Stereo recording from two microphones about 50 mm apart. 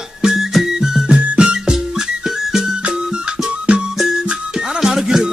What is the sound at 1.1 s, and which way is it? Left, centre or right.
Music, right.